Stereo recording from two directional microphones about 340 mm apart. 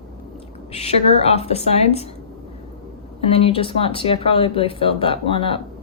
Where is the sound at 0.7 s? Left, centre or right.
Centre.